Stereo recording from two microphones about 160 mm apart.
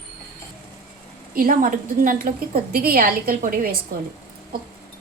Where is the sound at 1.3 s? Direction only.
65° right (ahead or behind).